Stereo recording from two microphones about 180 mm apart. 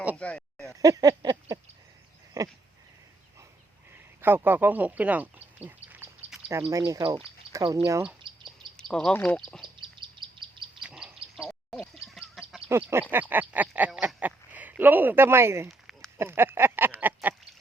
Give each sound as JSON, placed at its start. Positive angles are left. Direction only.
{"t": 0.2, "sound": "a sound", "side_deg": 5}
{"t": 0.7, "sound": "a sound", "side_deg": -20}
{"t": 4.2, "sound": "speech", "side_deg": -10}
{"t": 8.7, "sound": "speech", "side_deg": 5}
{"t": 9.8, "sound": "bird", "side_deg": -25}
{"t": 10.8, "sound": "bird", "side_deg": -5}
{"t": 12.0, "sound": "chicken", "side_deg": 0}
{"t": 12.6, "sound": "speech", "side_deg": -15}